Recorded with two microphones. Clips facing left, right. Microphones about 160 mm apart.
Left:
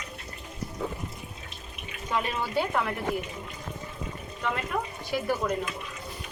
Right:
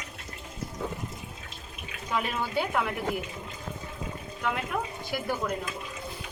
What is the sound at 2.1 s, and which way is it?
Speech, 5° right (ahead or behind).